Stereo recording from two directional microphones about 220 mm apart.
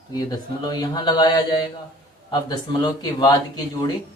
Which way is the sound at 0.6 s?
20° left (ahead or behind).